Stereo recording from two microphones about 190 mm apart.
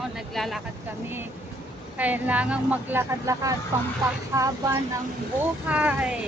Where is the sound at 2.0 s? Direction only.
10° right (ahead or behind).